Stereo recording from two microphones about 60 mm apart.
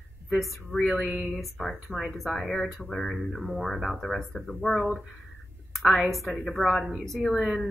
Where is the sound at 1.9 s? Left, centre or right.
Left.